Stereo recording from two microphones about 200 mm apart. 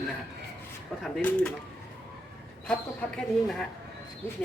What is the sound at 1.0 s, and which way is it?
Speech, 5° left (ahead or behind).